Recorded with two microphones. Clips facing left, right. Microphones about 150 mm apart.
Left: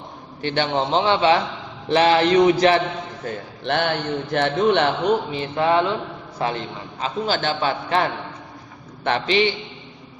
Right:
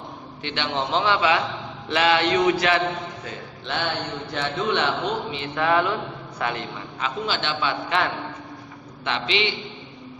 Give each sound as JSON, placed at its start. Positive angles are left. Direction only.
{"t": 0.4, "sound": "a man's voice", "side_deg": 40}
{"t": 3.3, "sound": "a man's voice", "side_deg": 45}
{"t": 3.6, "sound": "a man's voice", "side_deg": 60}
{"t": 5.3, "sound": "a sound", "side_deg": 30}
{"t": 6.4, "sound": "a man's voice", "side_deg": 30}
{"t": 9.0, "sound": "a man's voice", "side_deg": 45}